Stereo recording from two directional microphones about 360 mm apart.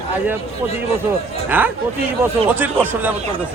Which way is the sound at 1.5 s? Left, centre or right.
Centre.